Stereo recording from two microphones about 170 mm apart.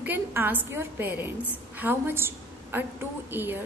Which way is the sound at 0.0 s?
10° right (ahead or behind).